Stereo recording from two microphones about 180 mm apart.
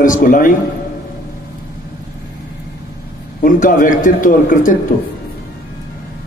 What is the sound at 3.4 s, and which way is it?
A man's voice, 50° left (ahead or behind).